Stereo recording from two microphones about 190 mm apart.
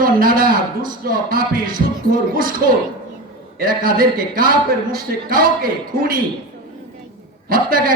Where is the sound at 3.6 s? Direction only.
50° right (ahead or behind).